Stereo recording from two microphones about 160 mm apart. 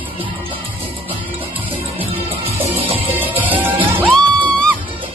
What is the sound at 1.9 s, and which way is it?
Music, 35° right (ahead or behind).